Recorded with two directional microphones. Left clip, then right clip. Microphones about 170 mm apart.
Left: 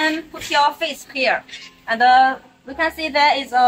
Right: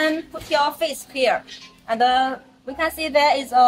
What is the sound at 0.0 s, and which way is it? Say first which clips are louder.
A woman's voice: left 1 dB; 40° right (ahead or behind).